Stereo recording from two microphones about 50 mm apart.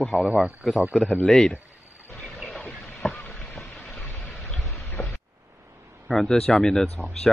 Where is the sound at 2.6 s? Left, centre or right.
Left.